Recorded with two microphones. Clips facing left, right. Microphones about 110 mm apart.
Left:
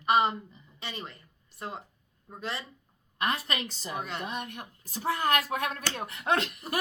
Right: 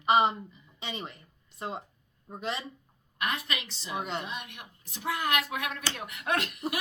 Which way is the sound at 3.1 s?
35° left (ahead or behind).